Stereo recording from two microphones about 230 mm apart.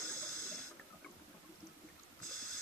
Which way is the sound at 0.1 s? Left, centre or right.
Left.